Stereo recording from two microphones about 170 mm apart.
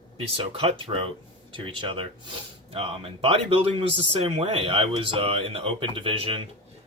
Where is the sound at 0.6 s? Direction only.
30° right (ahead or behind).